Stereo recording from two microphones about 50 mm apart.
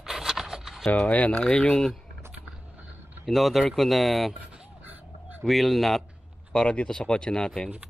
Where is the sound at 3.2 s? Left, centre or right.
Centre.